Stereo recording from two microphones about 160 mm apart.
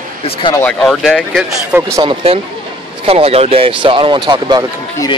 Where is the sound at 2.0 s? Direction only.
35° right (ahead or behind).